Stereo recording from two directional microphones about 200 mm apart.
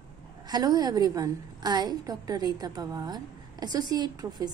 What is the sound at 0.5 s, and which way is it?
A woman's voice, 20° right (ahead or behind).